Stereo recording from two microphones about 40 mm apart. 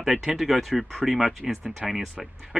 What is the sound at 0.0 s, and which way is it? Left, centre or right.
Speech, centre.